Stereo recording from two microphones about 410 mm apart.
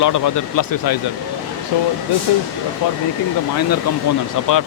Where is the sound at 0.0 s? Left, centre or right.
Left.